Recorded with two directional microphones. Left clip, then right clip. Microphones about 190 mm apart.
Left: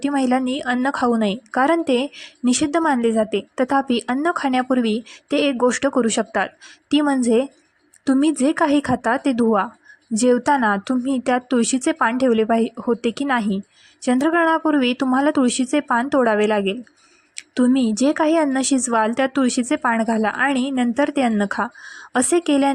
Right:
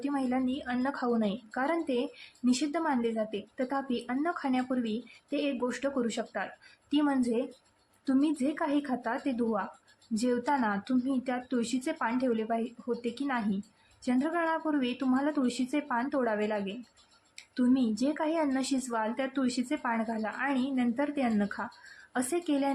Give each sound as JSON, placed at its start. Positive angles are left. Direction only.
{"t": 0.0, "sound": "a woman's voice", "side_deg": 45}